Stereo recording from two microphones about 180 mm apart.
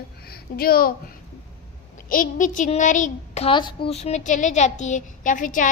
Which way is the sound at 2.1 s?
45° left (ahead or behind).